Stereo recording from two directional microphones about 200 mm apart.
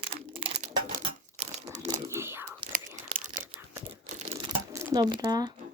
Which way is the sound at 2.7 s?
40° right (ahead or behind).